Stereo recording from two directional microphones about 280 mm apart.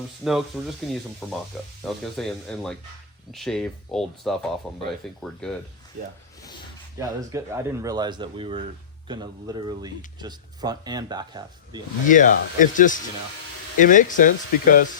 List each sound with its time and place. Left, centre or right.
0.3 s speech: centre
7.0 s speech: centre
12.0 s speech: left